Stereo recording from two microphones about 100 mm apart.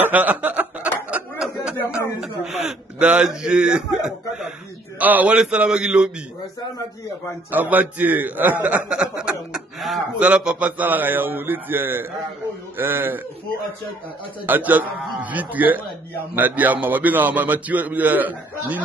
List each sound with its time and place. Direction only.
0.0 s chuckle: 15° right (ahead or behind)
1.4 s a sound: 10° right (ahead or behind)
2.1 s a man's voice: 5° right (ahead or behind)
7.7 s a man's voice: 20° right (ahead or behind); by 10.0 s centre (ahead or behind)
10.1 s a man's voice: 15° right (ahead or behind)
14.4 s a man's voice: 20° right (ahead or behind)